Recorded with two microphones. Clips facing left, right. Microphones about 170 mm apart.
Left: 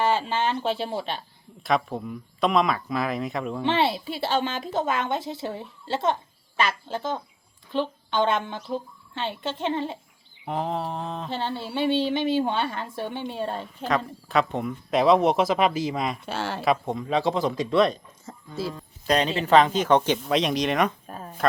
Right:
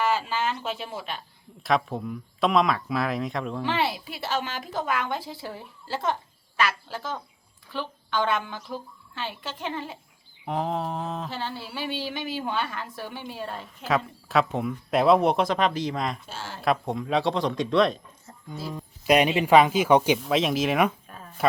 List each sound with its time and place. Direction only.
0.0 s speech: 30° left (ahead or behind)
1.6 s speech: centre (ahead or behind)
3.6 s a woman's voice: 25° left (ahead or behind)
10.4 s speech: centre (ahead or behind)
11.3 s a woman's voice: 25° left (ahead or behind)
13.8 s speech: 5° right (ahead or behind)
16.2 s speech: 70° left (ahead or behind)
16.6 s speech: centre (ahead or behind)
18.3 s speech: 90° left
18.7 s speech: 15° right (ahead or behind)